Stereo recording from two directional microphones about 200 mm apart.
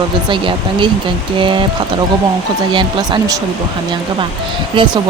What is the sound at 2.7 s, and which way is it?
Speech, 25° right (ahead or behind).